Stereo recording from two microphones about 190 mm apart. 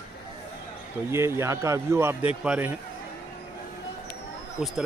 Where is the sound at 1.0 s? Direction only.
15° right (ahead or behind).